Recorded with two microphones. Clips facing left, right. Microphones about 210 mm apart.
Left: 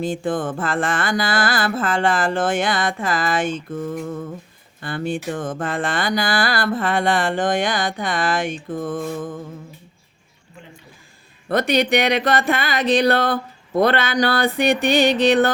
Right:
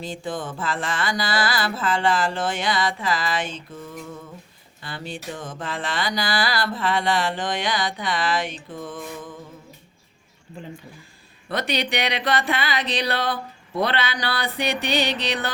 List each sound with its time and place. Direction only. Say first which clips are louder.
0.0 s music: left 7 dB; 50° left (ahead or behind)
11.4 s music: left 7 dB; 45° left (ahead or behind)